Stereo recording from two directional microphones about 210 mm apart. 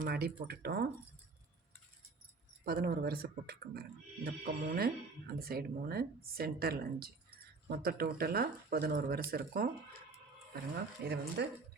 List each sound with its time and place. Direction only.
0.0 s speech: 45° right (ahead or behind)
2.6 s speech: 45° right (ahead or behind)
11.0 s speech: 50° right (ahead or behind)